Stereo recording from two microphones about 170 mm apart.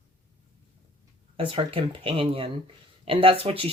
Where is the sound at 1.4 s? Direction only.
30° right (ahead or behind).